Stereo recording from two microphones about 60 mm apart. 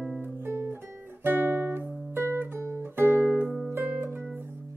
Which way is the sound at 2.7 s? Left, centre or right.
Right.